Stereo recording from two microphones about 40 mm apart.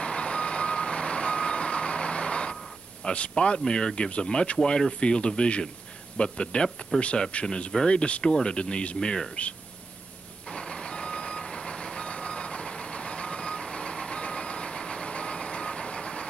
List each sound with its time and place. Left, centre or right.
0.0 s reversing beeps: left
3.0 s speech: left
10.5 s reversing beeps: left